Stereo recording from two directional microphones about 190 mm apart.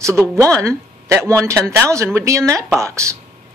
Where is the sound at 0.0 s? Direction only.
15° right (ahead or behind).